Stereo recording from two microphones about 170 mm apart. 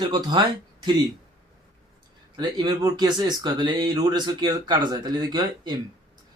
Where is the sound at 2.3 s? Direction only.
25° right (ahead or behind).